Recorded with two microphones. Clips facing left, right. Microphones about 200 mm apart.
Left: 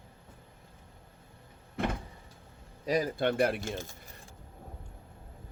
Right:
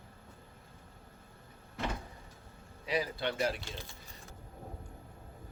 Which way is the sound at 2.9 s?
45° left (ahead or behind).